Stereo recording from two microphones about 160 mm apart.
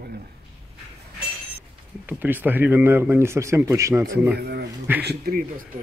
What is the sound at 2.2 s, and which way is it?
Speech, 10° right (ahead or behind).